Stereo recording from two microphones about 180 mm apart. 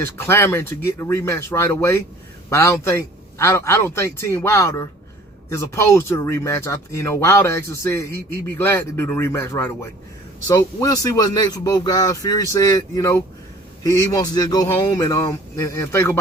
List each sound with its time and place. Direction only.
0.3 s speech: 15° left (ahead or behind)